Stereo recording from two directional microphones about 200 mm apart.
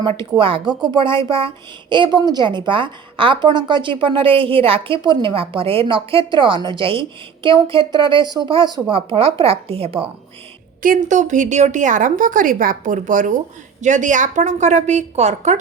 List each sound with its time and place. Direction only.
0.0 s a woman's voice: 25° right (ahead or behind)
10.8 s a woman's voice: 40° right (ahead or behind)